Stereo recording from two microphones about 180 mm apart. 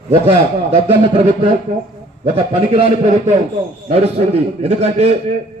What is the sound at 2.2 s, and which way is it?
A man's voice, 35° right (ahead or behind).